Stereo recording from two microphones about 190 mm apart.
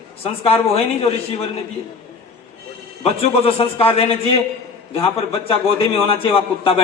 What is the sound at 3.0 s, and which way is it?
A man's voice, 30° left (ahead or behind).